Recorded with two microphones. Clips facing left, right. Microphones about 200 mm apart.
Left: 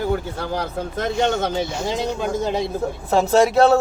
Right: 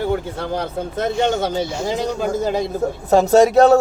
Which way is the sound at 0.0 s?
25° right (ahead or behind).